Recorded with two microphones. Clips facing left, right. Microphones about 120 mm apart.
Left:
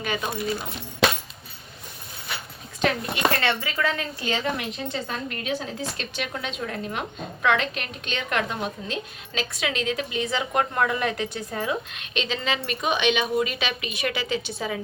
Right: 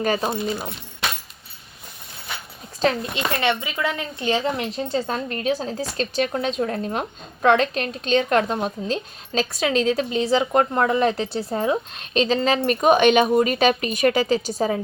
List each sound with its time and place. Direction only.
0.0 s a woman's voice: 35° right (ahead or behind)
3.3 s a woman's voice: 20° right (ahead or behind); by 14.8 s 40° right (ahead or behind)